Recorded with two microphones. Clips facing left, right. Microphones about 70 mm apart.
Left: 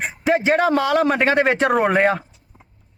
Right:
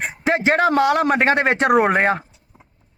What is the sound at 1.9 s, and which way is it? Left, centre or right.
Speech, right.